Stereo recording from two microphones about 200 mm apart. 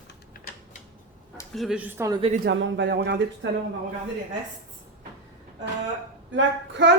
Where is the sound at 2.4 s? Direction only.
65° right (ahead or behind).